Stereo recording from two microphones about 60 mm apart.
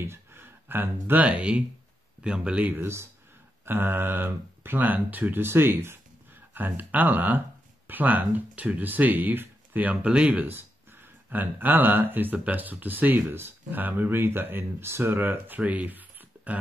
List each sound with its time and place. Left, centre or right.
0.0 s speech: right; by 2.7 s centre
2.7 s speech: right
11.2 s speech: right